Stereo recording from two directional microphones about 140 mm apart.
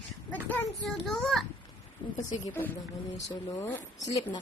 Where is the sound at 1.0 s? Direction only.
Centre (ahead or behind).